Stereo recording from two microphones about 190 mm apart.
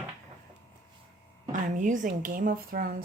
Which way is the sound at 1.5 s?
40° right (ahead or behind).